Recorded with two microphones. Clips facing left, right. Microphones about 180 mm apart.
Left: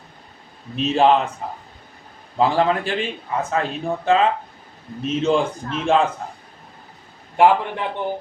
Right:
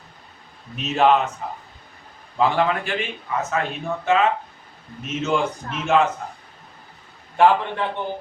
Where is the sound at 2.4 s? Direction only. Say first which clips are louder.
Left 2 dB; 35° left (ahead or behind).